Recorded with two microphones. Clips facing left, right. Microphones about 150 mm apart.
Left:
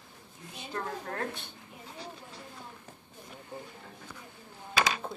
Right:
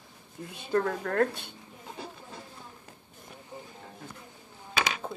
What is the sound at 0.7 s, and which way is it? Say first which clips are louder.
Speech: right 10 dB; 65° right (ahead or behind).